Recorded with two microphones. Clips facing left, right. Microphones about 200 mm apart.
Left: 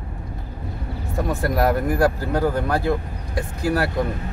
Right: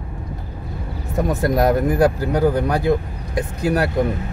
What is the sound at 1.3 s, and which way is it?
Speech, 20° right (ahead or behind).